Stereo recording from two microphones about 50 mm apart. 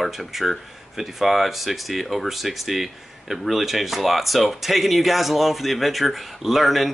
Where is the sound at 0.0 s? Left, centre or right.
Centre.